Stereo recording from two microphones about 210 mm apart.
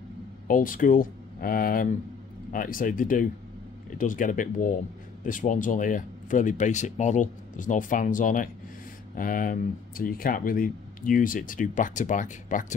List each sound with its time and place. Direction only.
0.5 s speech: 40° left (ahead or behind)